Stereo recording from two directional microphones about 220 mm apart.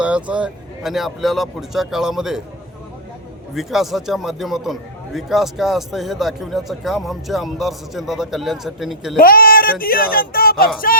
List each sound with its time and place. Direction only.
0.0 s a man's voice: 5° right (ahead or behind)
3.5 s a man's voice: centre (ahead or behind)
9.1 s speech: 40° left (ahead or behind)